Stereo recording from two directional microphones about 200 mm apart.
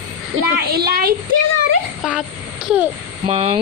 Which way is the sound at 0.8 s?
50° right (ahead or behind).